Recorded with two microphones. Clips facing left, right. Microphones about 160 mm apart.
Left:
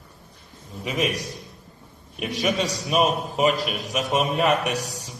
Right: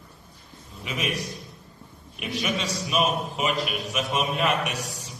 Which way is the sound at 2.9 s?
40° left (ahead or behind).